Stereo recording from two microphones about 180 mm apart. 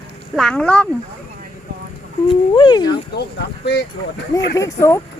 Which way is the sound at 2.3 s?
25° left (ahead or behind).